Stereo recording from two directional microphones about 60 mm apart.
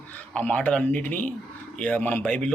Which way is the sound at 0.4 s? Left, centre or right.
Left.